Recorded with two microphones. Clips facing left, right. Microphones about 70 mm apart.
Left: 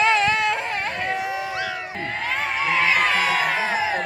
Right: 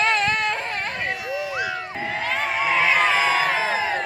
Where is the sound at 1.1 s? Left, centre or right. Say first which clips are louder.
Left 2 dB; left.